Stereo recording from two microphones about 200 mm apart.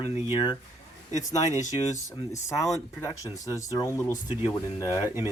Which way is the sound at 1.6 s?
35° left (ahead or behind).